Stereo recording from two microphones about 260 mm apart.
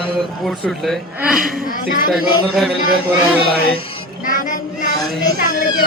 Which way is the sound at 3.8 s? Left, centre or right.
Left.